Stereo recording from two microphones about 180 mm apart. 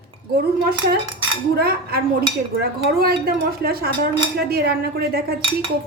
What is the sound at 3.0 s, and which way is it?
A woman's voice, 55° right (ahead or behind).